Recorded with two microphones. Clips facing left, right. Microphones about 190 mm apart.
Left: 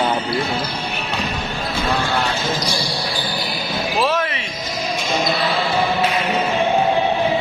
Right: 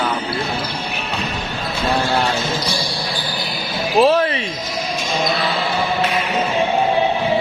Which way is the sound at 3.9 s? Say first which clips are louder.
Right 7 dB; 30° right (ahead or behind).